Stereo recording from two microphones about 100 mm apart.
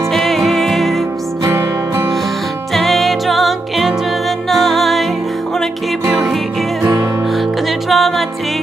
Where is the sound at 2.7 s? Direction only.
Centre (ahead or behind).